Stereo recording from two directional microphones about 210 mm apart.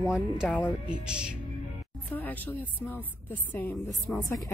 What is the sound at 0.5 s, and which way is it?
Speech, 5° left (ahead or behind).